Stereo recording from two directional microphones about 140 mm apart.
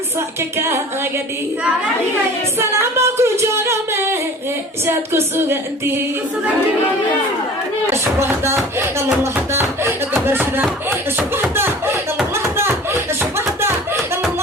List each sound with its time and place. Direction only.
2.6 s speech: 20° right (ahead or behind)
8.2 s speech: 20° right (ahead or behind)
11.5 s a sound: 15° right (ahead or behind)
13.6 s music: 15° right (ahead or behind)